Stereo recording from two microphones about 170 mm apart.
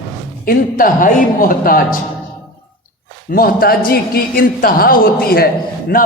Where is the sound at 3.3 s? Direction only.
60° left (ahead or behind).